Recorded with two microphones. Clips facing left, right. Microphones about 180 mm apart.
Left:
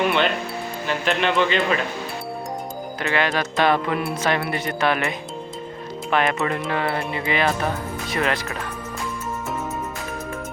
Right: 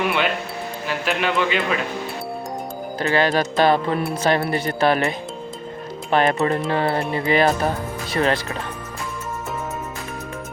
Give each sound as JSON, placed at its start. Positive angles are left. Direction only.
{"t": 0.9, "sound": "a man's voice", "side_deg": -5}
{"t": 3.0, "sound": "speech", "side_deg": -35}